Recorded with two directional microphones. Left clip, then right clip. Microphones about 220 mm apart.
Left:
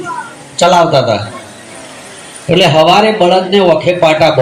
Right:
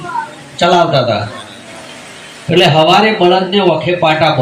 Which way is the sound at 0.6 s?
30° left (ahead or behind).